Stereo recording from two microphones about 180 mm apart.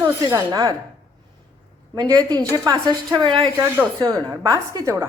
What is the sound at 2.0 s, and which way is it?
A woman's voice, 25° right (ahead or behind).